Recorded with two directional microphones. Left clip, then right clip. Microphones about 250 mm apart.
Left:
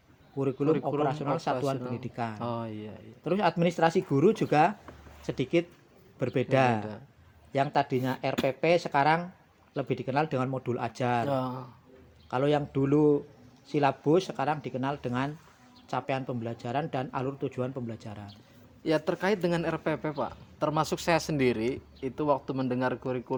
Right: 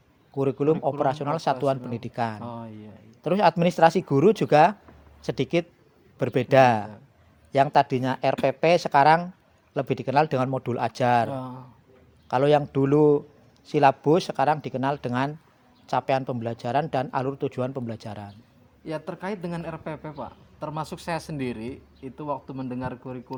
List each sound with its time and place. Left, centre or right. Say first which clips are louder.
0.3 s a man's voice: right 4 dB; right
2.4 s speech: left 3 dB; left
3.2 s a man's voice: right 6 dB; right
11.3 s speech: left 3 dB; left
12.3 s a man's voice: right 7 dB; right
18.9 s speech: left 5 dB; left